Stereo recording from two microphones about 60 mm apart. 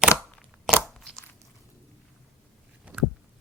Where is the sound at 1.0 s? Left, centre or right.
Centre.